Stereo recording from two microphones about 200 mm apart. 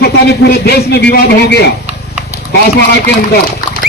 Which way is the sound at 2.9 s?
55° left (ahead or behind).